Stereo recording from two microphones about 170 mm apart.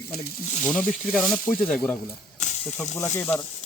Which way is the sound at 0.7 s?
Centre (ahead or behind).